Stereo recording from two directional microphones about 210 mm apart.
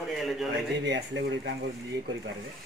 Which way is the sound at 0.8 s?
55° right (ahead or behind).